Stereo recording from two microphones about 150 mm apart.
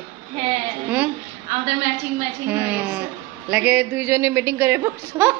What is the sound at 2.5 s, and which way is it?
A woman's voice, 10° right (ahead or behind).